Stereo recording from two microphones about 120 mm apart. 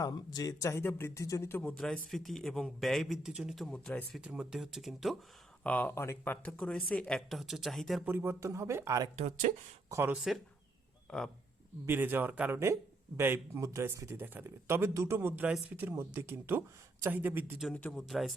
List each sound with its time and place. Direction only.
0.0 s speech: 35° left (ahead or behind); by 1.8 s 15° left (ahead or behind)
1.8 s speech: centre (ahead or behind)
4.2 s speech: 5° right (ahead or behind)
5.6 s speech: 15° left (ahead or behind)
8.0 s speech: 20° right (ahead or behind)
9.1 s speech: 75° right (ahead or behind)
9.9 s speech: 20° right (ahead or behind)
11.1 s speech: 5° left (ahead or behind)
11.9 s speech: 15° right (ahead or behind)
17.7 s speech: 10° left (ahead or behind)
18.1 s speech: centre (ahead or behind)